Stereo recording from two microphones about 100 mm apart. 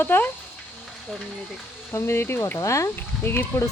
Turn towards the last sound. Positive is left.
turn(degrees=25)  # may be behind; listen again after turning